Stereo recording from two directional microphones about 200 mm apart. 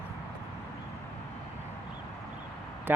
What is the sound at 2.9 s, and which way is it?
Speech, 10° right (ahead or behind).